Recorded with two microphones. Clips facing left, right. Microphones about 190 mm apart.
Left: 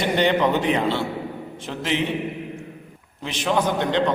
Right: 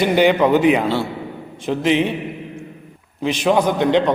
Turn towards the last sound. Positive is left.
turn(degrees=-15)  # may be behind; listen again after turning